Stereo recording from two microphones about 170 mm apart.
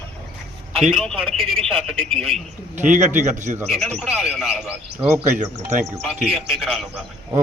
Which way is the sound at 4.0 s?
Centre (ahead or behind).